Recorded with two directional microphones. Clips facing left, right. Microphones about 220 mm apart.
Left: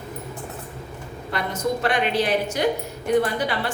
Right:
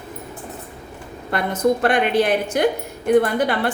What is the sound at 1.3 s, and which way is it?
A woman's voice, 55° right (ahead or behind).